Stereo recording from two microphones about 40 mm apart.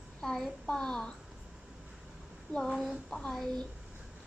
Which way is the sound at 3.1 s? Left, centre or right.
Centre.